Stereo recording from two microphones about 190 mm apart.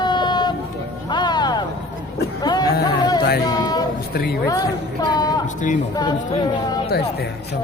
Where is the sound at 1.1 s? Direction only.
25° left (ahead or behind).